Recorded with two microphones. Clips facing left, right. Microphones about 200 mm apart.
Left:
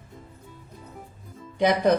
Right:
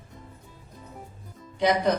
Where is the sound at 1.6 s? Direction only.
55° left (ahead or behind).